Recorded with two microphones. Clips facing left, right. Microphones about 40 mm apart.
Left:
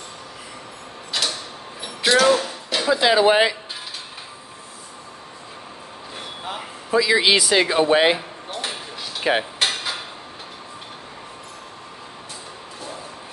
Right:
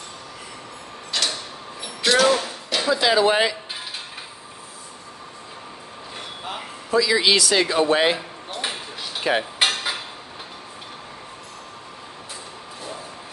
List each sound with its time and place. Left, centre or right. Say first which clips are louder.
1.1 s mechanisms: even; centre
1.8 s a sound: left 1 dB; centre
2.9 s speech: left 2 dB; centre
6.1 s vehicle: left 1 dB; centre
6.9 s speech: left 1 dB; centre
8.5 s a sound: right 1 dB; centre
9.2 s cutlery: left 1 dB; centre